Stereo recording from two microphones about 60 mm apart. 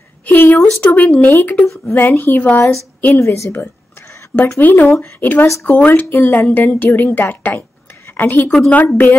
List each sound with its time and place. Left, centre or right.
0.3 s speech: left
3.2 s a woman's voice: left
4.6 s speech: left
8.5 s speech: left